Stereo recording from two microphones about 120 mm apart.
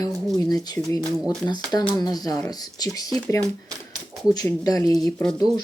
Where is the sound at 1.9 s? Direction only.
35° left (ahead or behind).